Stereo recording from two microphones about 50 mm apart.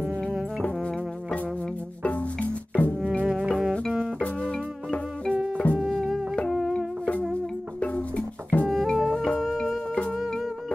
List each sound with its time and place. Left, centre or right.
2.0 s music: left
3.3 s music: centre
4.2 s music: left
5.6 s music: left
6.5 s music: centre
7.8 s music: left
8.6 s music: centre